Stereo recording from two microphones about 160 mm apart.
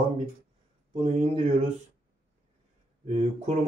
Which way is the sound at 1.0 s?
45° right (ahead or behind).